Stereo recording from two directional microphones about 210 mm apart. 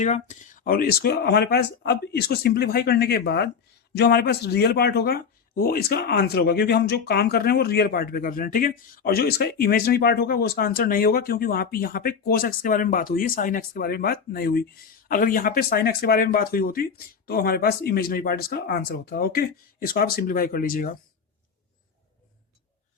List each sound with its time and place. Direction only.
0.0 s speech: 35° left (ahead or behind)